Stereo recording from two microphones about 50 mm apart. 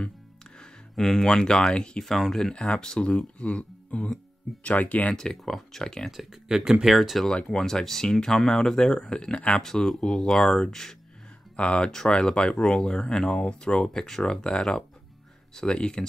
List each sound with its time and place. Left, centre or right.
0.6 s speech: centre; by 5.1 s left
5.1 s speech: centre
6.1 s speech: centre
7.4 s speech: centre
11.5 s speech: left